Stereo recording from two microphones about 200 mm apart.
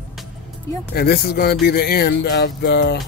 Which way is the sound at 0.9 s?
55° left (ahead or behind).